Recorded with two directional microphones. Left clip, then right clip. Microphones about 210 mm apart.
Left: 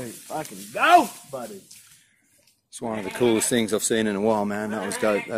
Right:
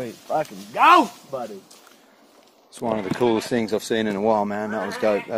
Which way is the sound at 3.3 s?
15° left (ahead or behind).